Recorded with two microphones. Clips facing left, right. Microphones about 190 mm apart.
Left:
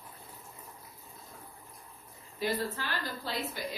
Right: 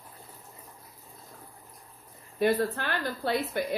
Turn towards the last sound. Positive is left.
turn(degrees=-60)  # may be behind; listen again after turning